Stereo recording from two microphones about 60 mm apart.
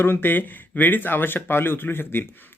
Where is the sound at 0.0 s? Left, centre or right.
Left.